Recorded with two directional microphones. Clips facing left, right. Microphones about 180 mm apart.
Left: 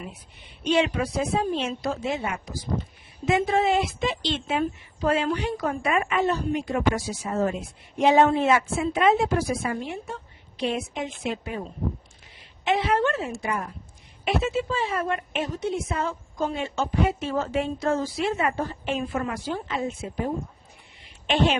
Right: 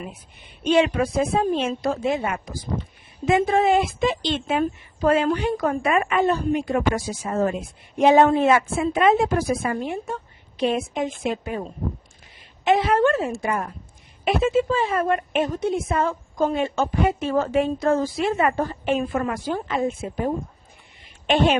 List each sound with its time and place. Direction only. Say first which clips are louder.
0.6 s a woman's voice: right 4 dB; 50° right (ahead or behind)
12.6 s a woman's voice: right 5 dB; 45° right (ahead or behind)
21.0 s a sound: right 3 dB; 50° right (ahead or behind)